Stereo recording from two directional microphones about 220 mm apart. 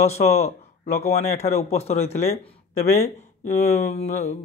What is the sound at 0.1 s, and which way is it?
Speech, 30° left (ahead or behind).